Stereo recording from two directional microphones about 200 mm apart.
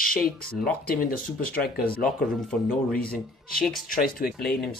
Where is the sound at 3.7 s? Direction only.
45° left (ahead or behind).